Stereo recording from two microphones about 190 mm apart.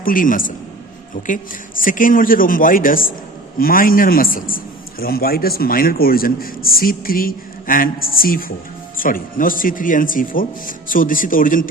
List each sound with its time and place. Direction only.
0.0 s a man's voice: 45° left (ahead or behind)
1.8 s a man's voice: 45° left (ahead or behind)